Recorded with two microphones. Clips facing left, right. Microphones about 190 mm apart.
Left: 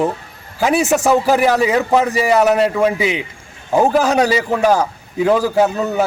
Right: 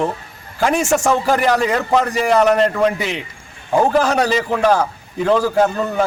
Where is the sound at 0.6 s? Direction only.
5° left (ahead or behind).